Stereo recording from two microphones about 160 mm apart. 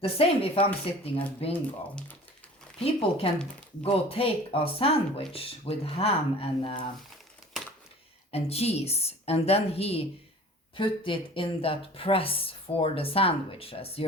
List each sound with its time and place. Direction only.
0.0 s speech: 35° left (ahead or behind)
1.5 s speech: 10° left (ahead or behind)
3.2 s speech: 35° left (ahead or behind)
8.3 s speech: 40° left (ahead or behind)